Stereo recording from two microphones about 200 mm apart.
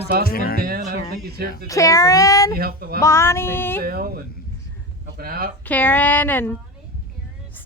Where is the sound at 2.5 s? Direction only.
50° right (ahead or behind).